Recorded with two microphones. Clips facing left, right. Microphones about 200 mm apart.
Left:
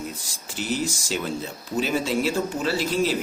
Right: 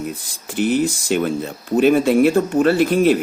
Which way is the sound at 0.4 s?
55° right (ahead or behind).